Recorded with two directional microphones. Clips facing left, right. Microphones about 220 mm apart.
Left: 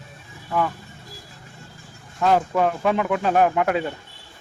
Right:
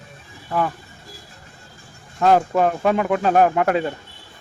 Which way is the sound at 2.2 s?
40° right (ahead or behind).